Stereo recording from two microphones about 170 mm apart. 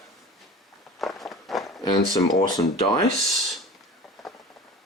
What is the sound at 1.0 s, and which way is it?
Walk, centre (ahead or behind).